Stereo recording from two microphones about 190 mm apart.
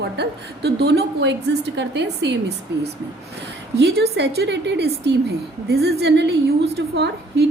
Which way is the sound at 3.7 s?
60° right (ahead or behind).